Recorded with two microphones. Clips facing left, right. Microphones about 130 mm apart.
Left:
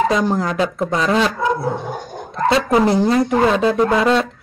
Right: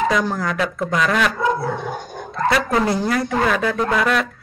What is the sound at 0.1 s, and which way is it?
Speech, 30° left (ahead or behind).